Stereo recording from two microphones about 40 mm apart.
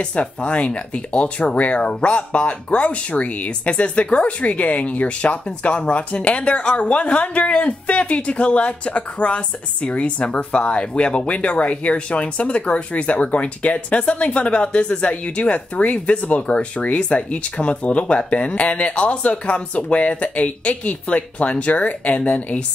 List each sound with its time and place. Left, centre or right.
0.0 s speech: left